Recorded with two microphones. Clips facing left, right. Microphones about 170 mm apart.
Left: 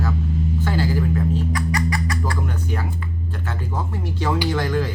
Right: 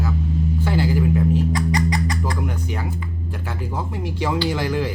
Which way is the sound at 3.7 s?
10° right (ahead or behind).